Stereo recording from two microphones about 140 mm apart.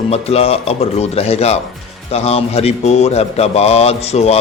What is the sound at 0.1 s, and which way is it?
Mantra, 45° left (ahead or behind).